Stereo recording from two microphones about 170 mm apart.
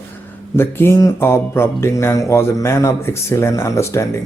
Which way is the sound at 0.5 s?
15° left (ahead or behind).